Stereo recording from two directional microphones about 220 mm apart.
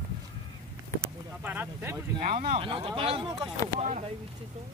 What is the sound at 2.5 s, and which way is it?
Speech, 25° right (ahead or behind).